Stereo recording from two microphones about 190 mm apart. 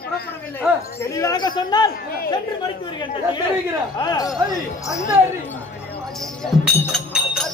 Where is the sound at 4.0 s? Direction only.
20° left (ahead or behind).